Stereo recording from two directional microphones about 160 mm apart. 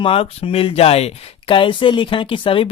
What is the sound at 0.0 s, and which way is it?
Speech, 35° left (ahead or behind).